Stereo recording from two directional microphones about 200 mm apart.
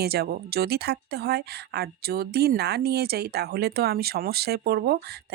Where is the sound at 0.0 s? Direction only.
50° right (ahead or behind).